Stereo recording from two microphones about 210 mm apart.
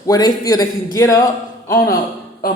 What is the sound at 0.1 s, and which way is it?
A woman's voice, 20° left (ahead or behind).